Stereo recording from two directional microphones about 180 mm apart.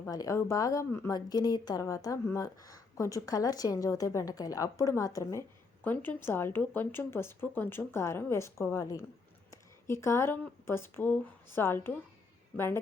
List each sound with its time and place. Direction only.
0.0 s a woman's voice: 20° left (ahead or behind)